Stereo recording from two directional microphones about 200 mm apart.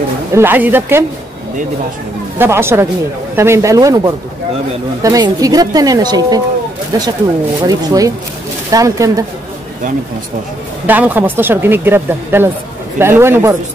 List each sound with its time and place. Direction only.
0.3 s speech: 10° right (ahead or behind)
2.3 s speech: 10° right (ahead or behind)
7.6 s speech: 20° right (ahead or behind)
10.9 s speech: 10° right (ahead or behind)